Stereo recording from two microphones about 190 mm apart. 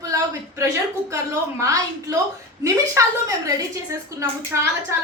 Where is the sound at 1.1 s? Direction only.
15° right (ahead or behind).